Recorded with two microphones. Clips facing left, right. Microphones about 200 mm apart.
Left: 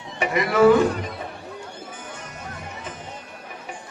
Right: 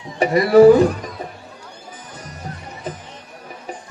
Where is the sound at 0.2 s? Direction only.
35° right (ahead or behind).